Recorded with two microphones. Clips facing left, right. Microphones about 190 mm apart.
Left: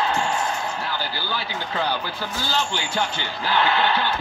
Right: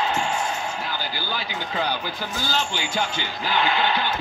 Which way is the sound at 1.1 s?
15° right (ahead or behind).